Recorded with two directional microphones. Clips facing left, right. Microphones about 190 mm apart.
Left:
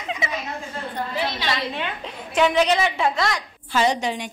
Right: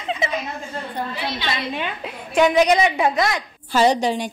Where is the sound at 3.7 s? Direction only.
35° right (ahead or behind).